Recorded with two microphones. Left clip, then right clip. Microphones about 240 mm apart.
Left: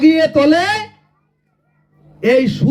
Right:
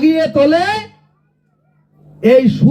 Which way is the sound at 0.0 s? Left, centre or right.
Left.